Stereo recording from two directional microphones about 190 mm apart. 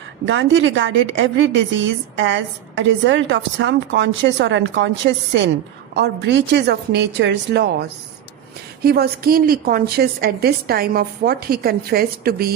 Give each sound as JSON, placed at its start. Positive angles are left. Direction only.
{"t": 0.3, "sound": "a woman's voice", "side_deg": -75}